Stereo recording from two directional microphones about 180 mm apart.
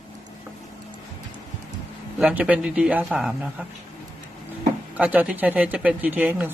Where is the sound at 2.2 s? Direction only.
5° right (ahead or behind).